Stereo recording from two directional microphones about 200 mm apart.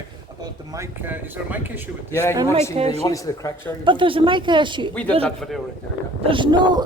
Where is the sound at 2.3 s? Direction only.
20° right (ahead or behind).